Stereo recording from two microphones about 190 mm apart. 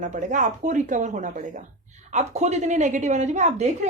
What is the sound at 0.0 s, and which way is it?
A woman's voice, 40° right (ahead or behind).